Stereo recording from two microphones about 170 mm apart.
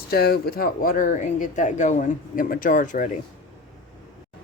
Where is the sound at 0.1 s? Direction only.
65° left (ahead or behind); by 3.1 s 50° left (ahead or behind).